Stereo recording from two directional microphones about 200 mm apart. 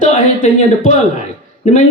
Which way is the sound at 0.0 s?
40° left (ahead or behind).